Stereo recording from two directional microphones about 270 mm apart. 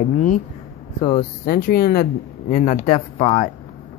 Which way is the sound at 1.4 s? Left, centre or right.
Left.